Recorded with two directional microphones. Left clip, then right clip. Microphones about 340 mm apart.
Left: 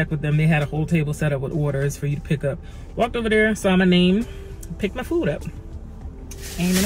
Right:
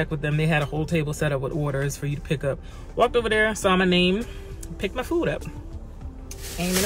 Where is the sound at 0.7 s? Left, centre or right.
Right.